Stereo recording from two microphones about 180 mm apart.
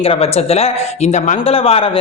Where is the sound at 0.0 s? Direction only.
35° left (ahead or behind).